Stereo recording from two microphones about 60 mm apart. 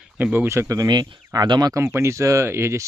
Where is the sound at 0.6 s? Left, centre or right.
Right.